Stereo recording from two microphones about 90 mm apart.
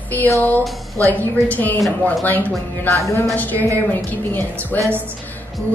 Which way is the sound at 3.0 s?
35° left (ahead or behind).